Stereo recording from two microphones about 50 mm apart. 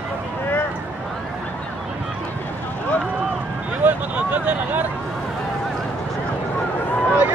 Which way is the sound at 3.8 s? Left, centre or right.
Right.